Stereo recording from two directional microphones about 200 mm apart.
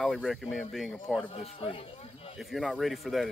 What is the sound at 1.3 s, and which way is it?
Speech, 30° left (ahead or behind).